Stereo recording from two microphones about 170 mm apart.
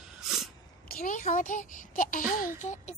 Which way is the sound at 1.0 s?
45° left (ahead or behind).